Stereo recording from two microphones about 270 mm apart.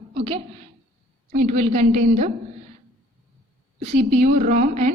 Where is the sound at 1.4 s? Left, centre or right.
Right.